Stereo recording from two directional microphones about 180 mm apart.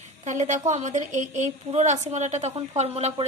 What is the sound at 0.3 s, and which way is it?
A woman's voice, 40° right (ahead or behind).